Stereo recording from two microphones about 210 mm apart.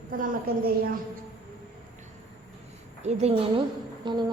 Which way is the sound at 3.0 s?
30° right (ahead or behind).